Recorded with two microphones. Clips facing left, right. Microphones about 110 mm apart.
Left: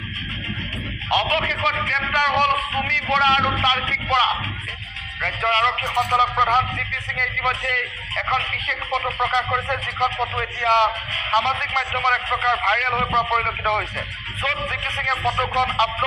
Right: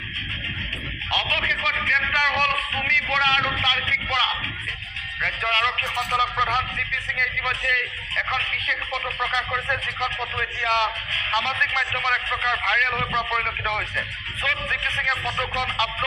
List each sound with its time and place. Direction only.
1.1 s a man's voice: 35° left (ahead or behind)